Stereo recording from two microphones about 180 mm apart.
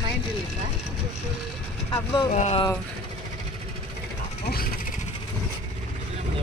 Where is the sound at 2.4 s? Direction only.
35° left (ahead or behind).